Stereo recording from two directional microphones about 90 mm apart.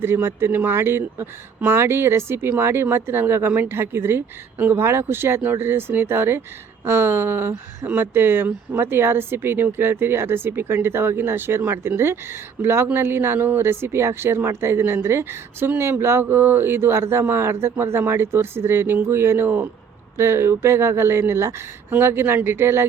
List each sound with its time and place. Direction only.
0.0 s speech: 25° right (ahead or behind)